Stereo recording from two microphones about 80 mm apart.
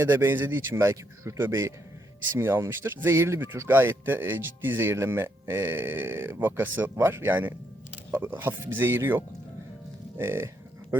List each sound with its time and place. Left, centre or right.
0.0 s speech: right